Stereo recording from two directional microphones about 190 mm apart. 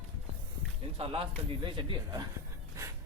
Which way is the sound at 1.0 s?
30° right (ahead or behind).